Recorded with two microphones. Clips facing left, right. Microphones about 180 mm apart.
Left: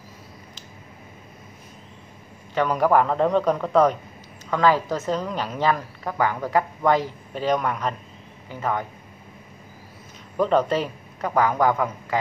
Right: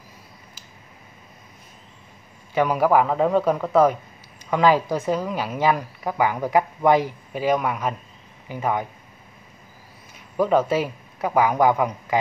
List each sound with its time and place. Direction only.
2.5 s a man's voice: 10° right (ahead or behind)
10.3 s a man's voice: 5° right (ahead or behind)